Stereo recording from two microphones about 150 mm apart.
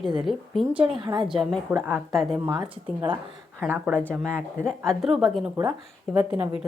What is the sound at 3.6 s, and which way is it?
Speech, 15° right (ahead or behind).